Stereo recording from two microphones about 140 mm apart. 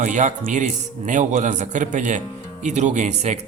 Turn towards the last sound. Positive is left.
turn(degrees=-55)  # may be behind; listen again after turning